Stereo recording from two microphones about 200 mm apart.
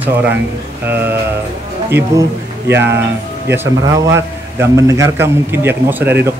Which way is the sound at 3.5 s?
10° right (ahead or behind).